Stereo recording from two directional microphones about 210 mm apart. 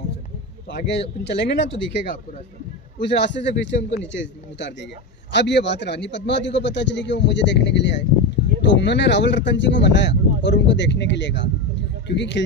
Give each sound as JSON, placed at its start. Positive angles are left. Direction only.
{"t": 0.7, "sound": "a man's voice", "side_deg": 55}